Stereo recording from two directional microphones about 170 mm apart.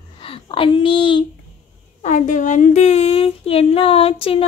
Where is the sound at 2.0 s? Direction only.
45° left (ahead or behind).